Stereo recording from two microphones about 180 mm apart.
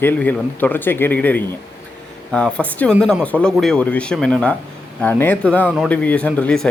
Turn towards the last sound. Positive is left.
turn(degrees=5)  # may be behind; listen again after turning